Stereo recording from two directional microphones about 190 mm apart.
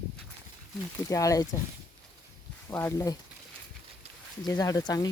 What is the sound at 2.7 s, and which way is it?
Speech, 15° left (ahead or behind).